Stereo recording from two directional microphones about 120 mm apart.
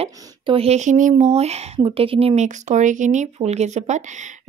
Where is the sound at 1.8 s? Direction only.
50° right (ahead or behind).